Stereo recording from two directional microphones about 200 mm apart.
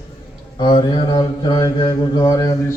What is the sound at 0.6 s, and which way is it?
Mantra, 25° left (ahead or behind).